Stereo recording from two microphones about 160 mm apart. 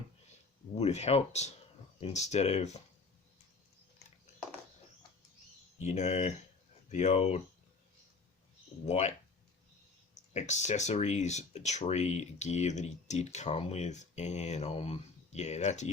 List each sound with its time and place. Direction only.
0.8 s speech: 40° left (ahead or behind)
5.8 s speech: 45° left (ahead or behind)
8.9 s speech: 45° left (ahead or behind)
10.3 s speech: 45° left (ahead or behind)